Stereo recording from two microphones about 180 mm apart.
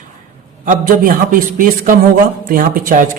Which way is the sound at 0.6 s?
50° right (ahead or behind).